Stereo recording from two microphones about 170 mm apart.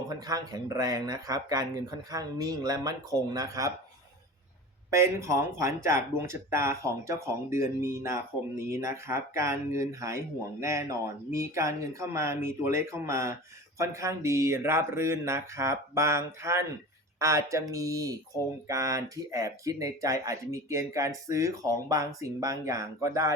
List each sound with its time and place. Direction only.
0.1 s speech: 20° right (ahead or behind)
4.9 s speech: 15° right (ahead or behind)